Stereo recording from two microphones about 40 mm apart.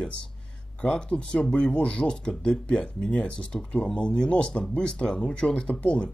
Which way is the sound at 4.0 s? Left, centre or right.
Left.